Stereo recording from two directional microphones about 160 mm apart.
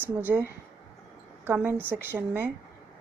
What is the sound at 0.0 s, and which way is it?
A woman's voice, 10° right (ahead or behind).